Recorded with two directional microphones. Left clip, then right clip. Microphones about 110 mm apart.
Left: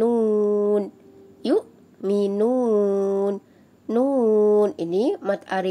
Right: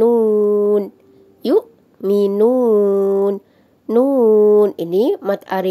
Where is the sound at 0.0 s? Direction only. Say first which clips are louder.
Right 7 dB; 30° right (ahead or behind).